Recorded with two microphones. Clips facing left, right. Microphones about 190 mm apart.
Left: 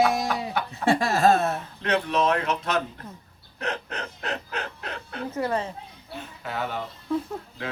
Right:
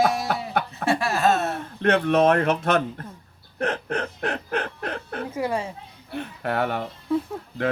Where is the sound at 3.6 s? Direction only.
50° right (ahead or behind).